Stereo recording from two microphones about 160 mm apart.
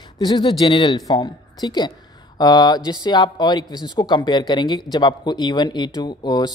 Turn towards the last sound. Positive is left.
turn(degrees=25)  # may be behind; listen again after turning